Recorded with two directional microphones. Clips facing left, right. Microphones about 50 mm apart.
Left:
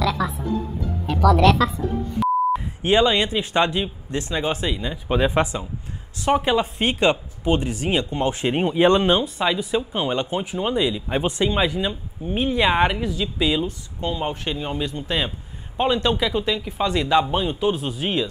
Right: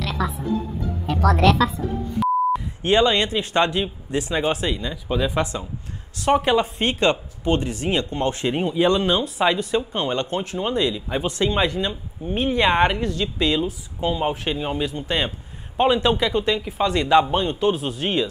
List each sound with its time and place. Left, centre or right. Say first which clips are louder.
2.1 s speech: even; centre
4.9 s speech: left 5 dB; left
6.1 s speech: right 1 dB; centre
8.5 s speech: left 3 dB; left
9.2 s speech: right 2 dB; centre